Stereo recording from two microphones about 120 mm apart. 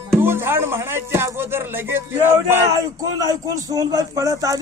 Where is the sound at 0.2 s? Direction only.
20° right (ahead or behind).